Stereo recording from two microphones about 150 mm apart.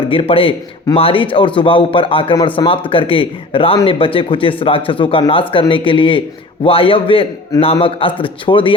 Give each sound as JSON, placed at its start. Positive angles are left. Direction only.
{"t": 0.1, "sound": "a man's voice", "side_deg": 40}